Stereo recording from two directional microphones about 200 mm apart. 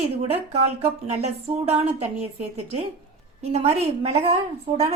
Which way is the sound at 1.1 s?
30° right (ahead or behind).